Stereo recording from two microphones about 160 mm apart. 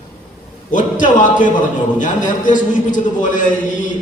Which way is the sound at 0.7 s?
55° left (ahead or behind).